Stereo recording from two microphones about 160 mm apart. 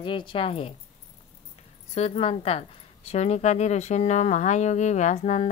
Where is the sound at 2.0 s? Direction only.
40° left (ahead or behind).